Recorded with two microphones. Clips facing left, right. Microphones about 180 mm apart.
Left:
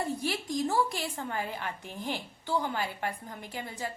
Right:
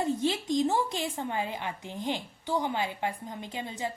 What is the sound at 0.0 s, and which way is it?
A woman's voice, 20° right (ahead or behind).